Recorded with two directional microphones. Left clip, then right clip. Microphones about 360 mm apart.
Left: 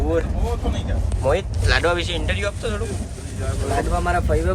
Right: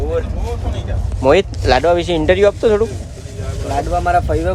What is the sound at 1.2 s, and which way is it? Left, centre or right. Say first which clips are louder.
Speech: right 9 dB; right.